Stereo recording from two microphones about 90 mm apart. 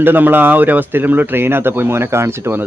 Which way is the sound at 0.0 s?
20° right (ahead or behind).